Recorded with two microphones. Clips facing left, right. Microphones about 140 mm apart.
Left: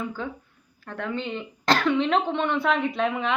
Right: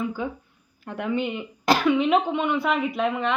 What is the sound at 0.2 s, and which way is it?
Speech, 10° right (ahead or behind).